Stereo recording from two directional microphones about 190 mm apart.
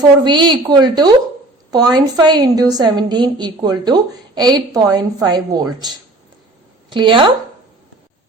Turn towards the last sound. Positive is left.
turn(degrees=-25)  # may be behind; listen again after turning